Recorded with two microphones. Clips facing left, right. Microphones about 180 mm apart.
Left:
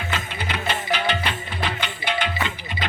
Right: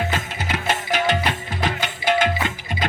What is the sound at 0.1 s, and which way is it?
Music, 45° right (ahead or behind).